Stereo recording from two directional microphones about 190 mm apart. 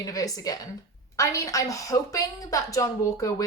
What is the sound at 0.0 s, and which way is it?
Speech, 20° left (ahead or behind).